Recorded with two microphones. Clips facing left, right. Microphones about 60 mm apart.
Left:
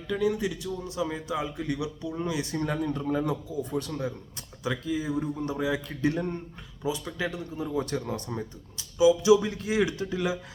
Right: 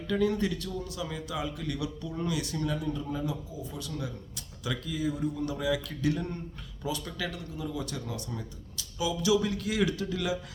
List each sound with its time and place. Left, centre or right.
0.1 s a man's voice: centre
0.9 s speech: left
2.6 s a man's voice: left
4.0 s speech: left
6.8 s speech: centre; by 8.4 s left
8.8 s speech: left